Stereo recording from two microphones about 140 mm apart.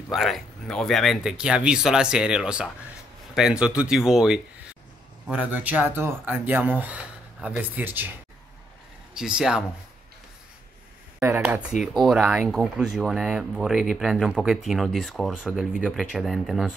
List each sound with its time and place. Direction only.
0.1 s speech: centre (ahead or behind)
9.1 s speech: 5° right (ahead or behind)
11.1 s speech: 15° right (ahead or behind)
11.8 s speech: centre (ahead or behind)